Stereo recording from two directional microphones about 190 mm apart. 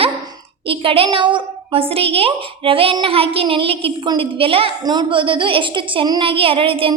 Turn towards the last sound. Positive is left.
turn(degrees=-30)  # may be behind; listen again after turning